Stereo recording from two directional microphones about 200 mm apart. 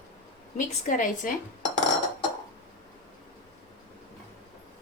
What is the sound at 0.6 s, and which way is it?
Speech, 40° left (ahead or behind).